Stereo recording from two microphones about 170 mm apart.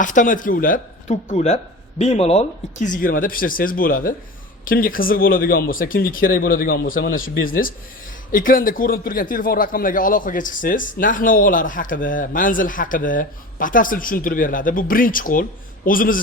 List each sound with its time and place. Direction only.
0.0 s a man's voice: 50° left (ahead or behind)